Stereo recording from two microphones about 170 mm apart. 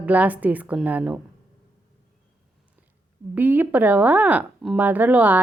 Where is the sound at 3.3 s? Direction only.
10° right (ahead or behind).